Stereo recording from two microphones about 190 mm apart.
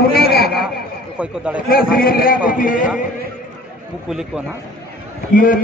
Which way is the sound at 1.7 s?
50° left (ahead or behind).